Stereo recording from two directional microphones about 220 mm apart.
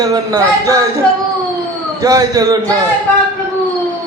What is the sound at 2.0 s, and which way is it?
Speech, 15° right (ahead or behind).